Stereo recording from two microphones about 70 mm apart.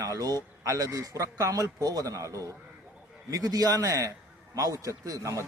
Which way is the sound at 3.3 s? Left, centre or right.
Right.